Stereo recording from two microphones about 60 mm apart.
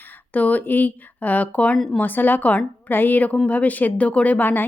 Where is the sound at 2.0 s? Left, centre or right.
Left.